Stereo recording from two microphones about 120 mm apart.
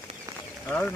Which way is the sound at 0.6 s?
15° left (ahead or behind).